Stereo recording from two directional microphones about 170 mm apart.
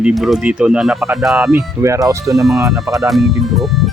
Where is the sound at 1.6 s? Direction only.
15° right (ahead or behind).